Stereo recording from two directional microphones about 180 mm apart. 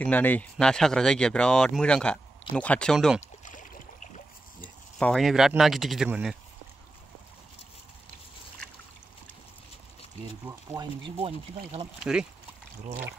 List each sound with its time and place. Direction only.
0.0 s speech: 10° left (ahead or behind)
3.2 s a sound: 45° left (ahead or behind)
4.6 s speech: 5° left (ahead or behind)
11.1 s speech: 35° right (ahead or behind)
12.0 s speech: 5° right (ahead or behind)